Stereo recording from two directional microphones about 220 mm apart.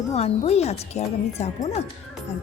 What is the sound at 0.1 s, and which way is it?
Speech, 30° left (ahead or behind).